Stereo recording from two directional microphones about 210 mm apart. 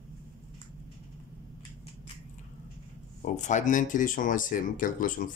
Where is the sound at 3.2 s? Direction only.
35° left (ahead or behind).